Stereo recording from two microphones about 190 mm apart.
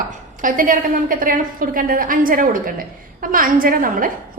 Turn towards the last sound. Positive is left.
turn(degrees=-45)  # may be behind; listen again after turning